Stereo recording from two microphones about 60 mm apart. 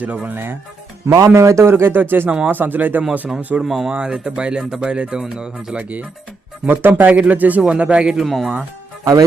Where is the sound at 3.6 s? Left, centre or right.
Centre.